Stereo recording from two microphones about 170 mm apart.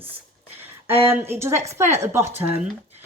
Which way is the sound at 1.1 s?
15° right (ahead or behind).